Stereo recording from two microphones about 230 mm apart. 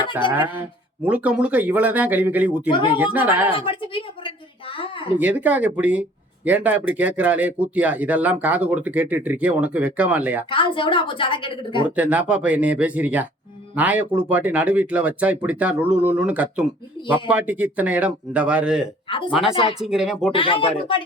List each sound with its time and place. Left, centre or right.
0.3 s speech: centre
2.6 s a woman's voice: left
3.0 s speech: centre
3.5 s a sound: left
5.1 s speech: centre
10.5 s a woman's voice: left
11.9 s speech: centre
19.0 s speech: left
19.3 s speech: centre
20.3 s a woman's voice: left